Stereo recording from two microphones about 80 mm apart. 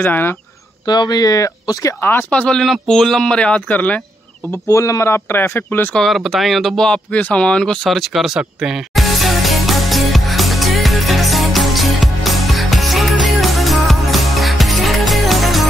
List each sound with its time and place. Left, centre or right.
0.0 s speech: left
0.8 s speech: left
2.0 s speech: left
2.3 s speech: centre
2.6 s speech: centre
4.5 s speech: left
5.9 s speech: centre
7.1 s a sound: centre